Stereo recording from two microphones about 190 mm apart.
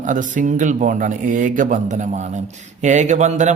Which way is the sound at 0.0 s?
45° right (ahead or behind).